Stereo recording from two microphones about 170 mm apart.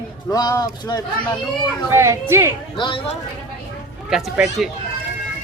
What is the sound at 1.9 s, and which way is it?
Speech, 15° right (ahead or behind).